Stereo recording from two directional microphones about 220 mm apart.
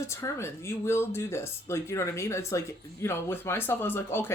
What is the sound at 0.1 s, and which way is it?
Speech, 10° left (ahead or behind).